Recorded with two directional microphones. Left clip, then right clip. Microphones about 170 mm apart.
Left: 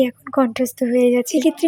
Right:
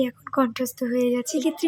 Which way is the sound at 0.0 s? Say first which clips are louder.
Left 6 dB; 20° left (ahead or behind).